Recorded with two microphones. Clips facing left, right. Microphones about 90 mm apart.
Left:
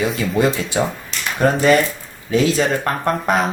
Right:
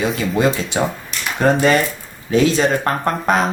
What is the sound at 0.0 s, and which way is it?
Speech, 20° right (ahead or behind).